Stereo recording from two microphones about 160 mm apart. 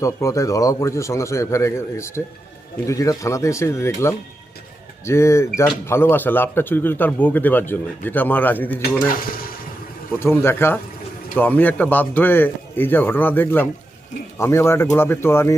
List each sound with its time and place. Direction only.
0.0 s a man's voice: 20° left (ahead or behind)
10.2 s speech: 15° left (ahead or behind)